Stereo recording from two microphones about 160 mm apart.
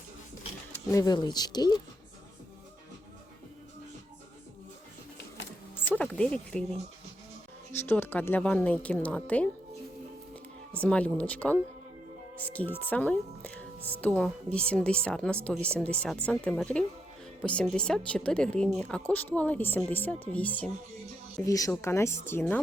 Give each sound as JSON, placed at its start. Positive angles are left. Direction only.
{"t": 0.9, "sound": "speech", "side_deg": 20}
{"t": 5.7, "sound": "music", "side_deg": 10}
{"t": 7.8, "sound": "a woman's voice", "side_deg": 15}
{"t": 10.8, "sound": "a woman's voice", "side_deg": 10}
{"t": 21.3, "sound": "a woman's voice", "side_deg": 20}